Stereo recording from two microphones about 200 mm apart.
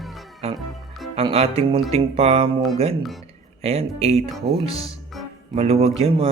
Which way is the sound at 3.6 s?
30° right (ahead or behind).